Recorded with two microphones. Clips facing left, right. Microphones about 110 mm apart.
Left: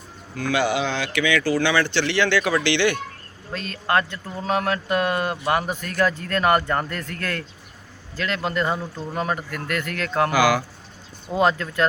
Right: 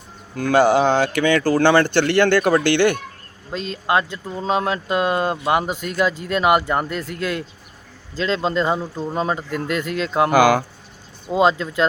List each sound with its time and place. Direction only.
0.3 s speech: 45° right (ahead or behind)
3.5 s speech: 20° right (ahead or behind)
10.3 s speech: 50° right (ahead or behind)
11.3 s speech: 20° right (ahead or behind)